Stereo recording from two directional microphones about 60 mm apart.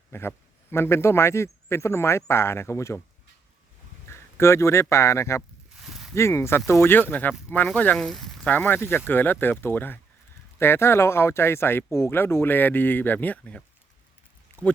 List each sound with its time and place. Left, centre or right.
0.1 s speech: left
4.1 s speech: left
5.7 s a sound: centre
6.1 s speech: left
7.1 s speech: left
7.9 s speech: centre
8.4 s speech: left